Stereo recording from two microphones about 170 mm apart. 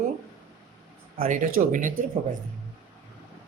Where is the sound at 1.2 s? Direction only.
50° right (ahead or behind).